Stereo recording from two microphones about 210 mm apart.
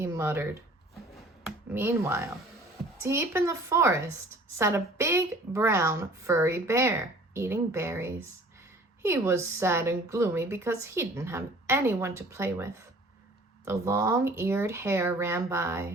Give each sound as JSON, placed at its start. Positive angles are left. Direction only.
{"t": 0.0, "sound": "speech", "side_deg": -10}
{"t": 1.5, "sound": "a woman's voice", "side_deg": -10}